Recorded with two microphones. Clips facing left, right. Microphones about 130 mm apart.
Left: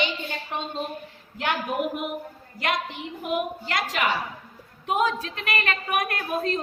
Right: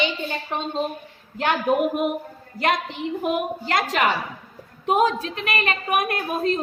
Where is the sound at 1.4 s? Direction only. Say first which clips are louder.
Right 6 dB; 40° right (ahead or behind).